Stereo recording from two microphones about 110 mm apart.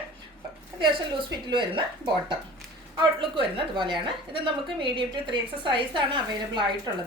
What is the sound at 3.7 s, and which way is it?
A woman's voice, 45° right (ahead or behind).